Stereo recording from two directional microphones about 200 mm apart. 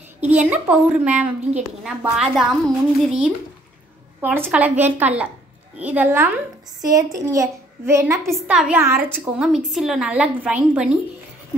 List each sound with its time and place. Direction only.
0.3 s a child's voice: 5° right (ahead or behind)
8.3 s a woman's voice: centre (ahead or behind)